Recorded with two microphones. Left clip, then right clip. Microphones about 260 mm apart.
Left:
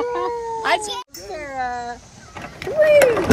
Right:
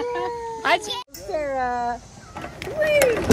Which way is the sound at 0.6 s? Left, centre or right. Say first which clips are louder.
Even; centre.